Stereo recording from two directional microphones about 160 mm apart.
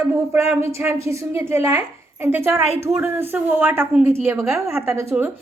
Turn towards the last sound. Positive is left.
turn(degrees=-15)  # may be behind; listen again after turning